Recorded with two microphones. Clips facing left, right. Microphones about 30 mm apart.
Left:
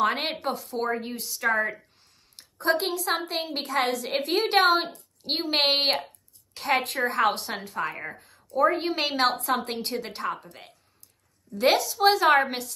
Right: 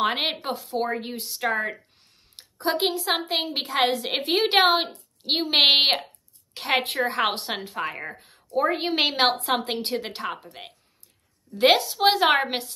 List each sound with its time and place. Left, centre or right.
0.1 s a woman's voice: right
2.3 s a sound: right
3.2 s a woman's voice: right
7.5 s a woman's voice: right
8.2 s a sound: right
8.7 s a woman's voice: right